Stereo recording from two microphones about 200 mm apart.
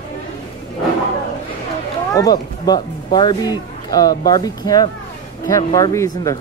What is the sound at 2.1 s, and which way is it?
Speech, 20° left (ahead or behind).